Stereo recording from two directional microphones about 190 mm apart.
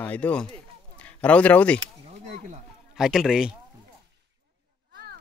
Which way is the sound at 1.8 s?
35° right (ahead or behind).